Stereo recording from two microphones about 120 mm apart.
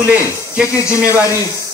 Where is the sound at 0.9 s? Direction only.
25° left (ahead or behind).